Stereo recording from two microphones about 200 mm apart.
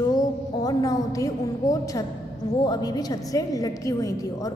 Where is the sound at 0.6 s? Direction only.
15° left (ahead or behind).